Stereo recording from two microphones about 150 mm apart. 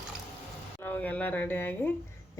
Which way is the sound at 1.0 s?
10° left (ahead or behind).